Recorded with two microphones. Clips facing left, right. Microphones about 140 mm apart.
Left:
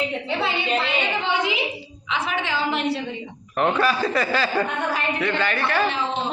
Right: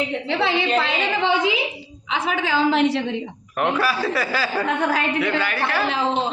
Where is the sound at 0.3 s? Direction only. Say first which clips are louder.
Right 5 dB; 90° right.